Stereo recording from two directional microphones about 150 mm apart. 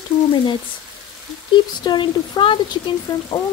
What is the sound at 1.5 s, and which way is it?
Speech, 30° left (ahead or behind).